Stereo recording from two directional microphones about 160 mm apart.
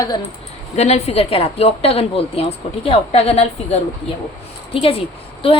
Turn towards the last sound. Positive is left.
turn(degrees=35)  # may be behind; listen again after turning